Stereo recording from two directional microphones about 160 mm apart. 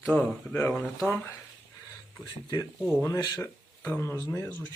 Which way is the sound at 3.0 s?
20° left (ahead or behind).